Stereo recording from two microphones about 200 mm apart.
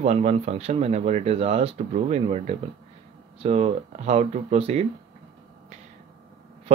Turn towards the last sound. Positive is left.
turn(degrees=-30)  # may be behind; listen again after turning